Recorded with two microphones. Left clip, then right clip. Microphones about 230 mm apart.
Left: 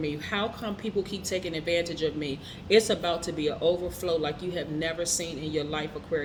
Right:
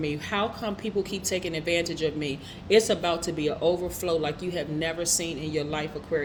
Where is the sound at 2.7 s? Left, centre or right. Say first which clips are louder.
Right 1 dB; right.